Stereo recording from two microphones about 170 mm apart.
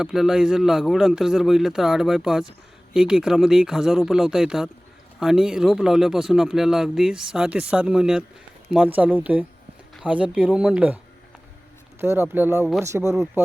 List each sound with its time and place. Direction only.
0.0 s speech: centre (ahead or behind)